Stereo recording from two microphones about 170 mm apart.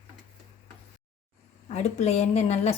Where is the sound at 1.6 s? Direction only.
40° left (ahead or behind).